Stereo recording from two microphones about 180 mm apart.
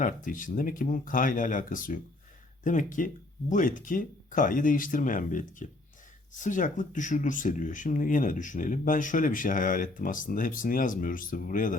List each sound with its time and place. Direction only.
0.0 s speech: 45° left (ahead or behind)